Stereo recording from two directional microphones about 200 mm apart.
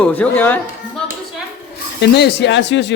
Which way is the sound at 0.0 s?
10° left (ahead or behind).